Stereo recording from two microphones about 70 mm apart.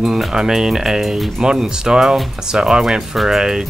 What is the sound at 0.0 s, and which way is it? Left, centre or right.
Speech, centre.